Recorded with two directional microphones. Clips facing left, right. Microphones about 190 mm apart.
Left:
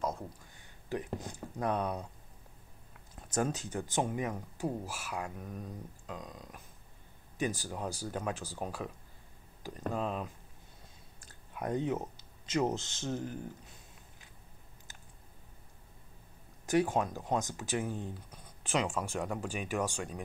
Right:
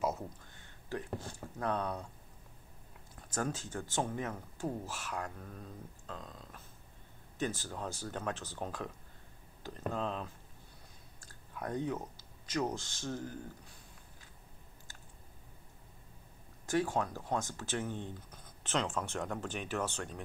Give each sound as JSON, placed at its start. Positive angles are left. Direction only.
{"t": 0.8, "sound": "speech", "side_deg": 15}
{"t": 3.3, "sound": "speech", "side_deg": 20}
{"t": 16.6, "sound": "speech", "side_deg": 20}